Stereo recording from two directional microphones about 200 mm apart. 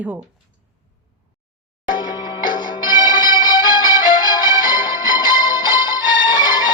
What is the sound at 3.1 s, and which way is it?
Music, 20° left (ahead or behind).